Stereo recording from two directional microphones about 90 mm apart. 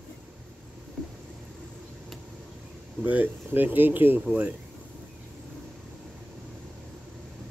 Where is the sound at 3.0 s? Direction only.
20° right (ahead or behind).